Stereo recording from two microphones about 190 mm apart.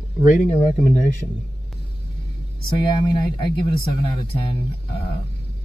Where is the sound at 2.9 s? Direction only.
25° left (ahead or behind).